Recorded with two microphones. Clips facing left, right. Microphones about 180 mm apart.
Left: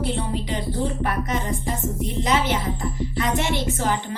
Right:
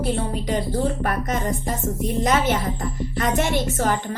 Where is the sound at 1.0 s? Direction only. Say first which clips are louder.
Right 1 dB; 45° right (ahead or behind).